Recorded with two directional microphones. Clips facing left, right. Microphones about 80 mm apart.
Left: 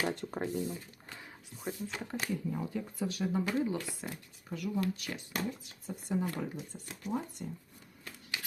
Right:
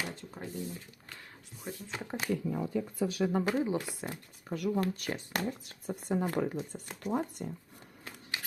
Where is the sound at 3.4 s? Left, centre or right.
Right.